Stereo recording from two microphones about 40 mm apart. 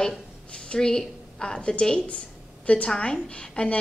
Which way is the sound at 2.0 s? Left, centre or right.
Left.